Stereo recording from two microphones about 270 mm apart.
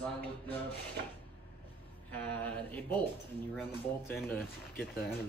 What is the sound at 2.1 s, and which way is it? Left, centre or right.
Speech, centre.